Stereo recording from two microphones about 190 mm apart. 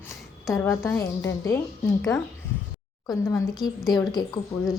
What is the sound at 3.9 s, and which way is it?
Speech, 20° left (ahead or behind).